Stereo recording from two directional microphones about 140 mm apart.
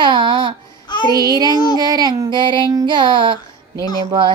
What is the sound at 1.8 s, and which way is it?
Child singing, 30° right (ahead or behind).